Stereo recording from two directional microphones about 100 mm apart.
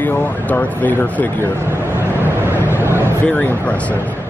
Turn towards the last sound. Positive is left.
turn(degrees=15)  # may be behind; listen again after turning